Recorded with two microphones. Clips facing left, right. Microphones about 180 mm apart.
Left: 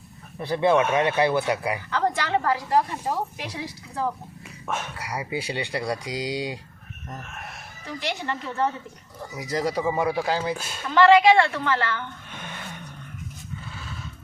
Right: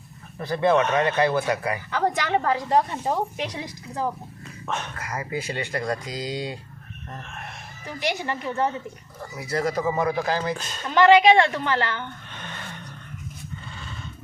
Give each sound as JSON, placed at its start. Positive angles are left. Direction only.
{"t": 0.3, "sound": "speech", "side_deg": 10}
{"t": 1.9, "sound": "speech", "side_deg": -15}
{"t": 4.6, "sound": "speech", "side_deg": 10}
{"t": 7.9, "sound": "a woman's voice", "side_deg": -15}
{"t": 9.3, "sound": "speech", "side_deg": 15}
{"t": 10.8, "sound": "a woman's voice", "side_deg": -15}
{"t": 12.3, "sound": "a sound", "side_deg": 10}